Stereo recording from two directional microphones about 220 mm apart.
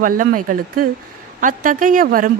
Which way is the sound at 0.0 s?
40° right (ahead or behind).